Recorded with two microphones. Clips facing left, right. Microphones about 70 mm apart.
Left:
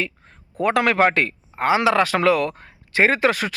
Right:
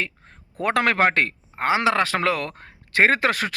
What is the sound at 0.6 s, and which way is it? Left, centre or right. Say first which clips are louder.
Speech: left 2 dB; right.